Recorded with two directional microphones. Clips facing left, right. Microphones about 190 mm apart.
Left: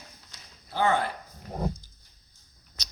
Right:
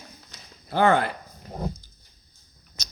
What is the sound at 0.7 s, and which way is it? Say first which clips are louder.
Speech: right 5 dB; 75° right (ahead or behind).